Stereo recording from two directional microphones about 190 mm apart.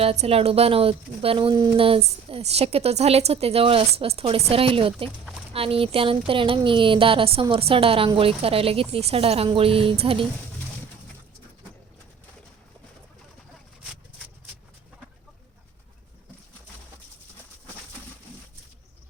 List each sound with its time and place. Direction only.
0.0 s a woman's voice: 30° right (ahead or behind)